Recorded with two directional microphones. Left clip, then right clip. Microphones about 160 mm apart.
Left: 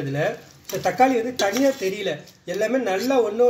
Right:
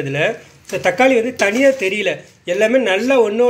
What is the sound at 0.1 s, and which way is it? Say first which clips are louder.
Speech: right 6 dB; 20° right (ahead or behind).